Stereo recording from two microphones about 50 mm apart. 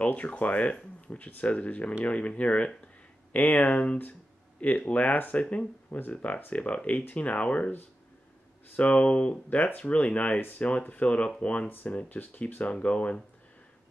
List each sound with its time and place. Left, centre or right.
0.0 s speech: left
5.9 s speech: left
6.5 s speech: left
8.7 s speech: left
12.7 s speech: left